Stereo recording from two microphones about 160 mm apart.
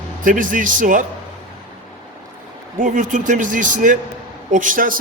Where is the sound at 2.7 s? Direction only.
55° right (ahead or behind).